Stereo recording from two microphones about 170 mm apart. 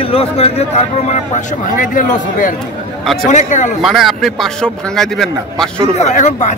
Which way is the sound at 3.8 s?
Centre (ahead or behind).